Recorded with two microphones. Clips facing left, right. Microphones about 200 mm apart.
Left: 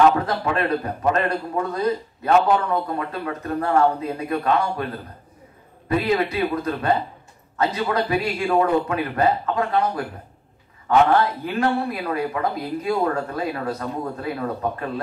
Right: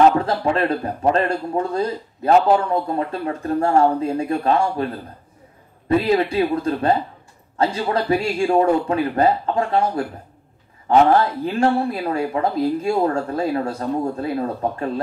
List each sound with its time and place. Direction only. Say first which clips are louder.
0.2 s speech: right 3 dB; 30° right (ahead or behind)
5.9 s speech: right 3 dB; 25° right (ahead or behind)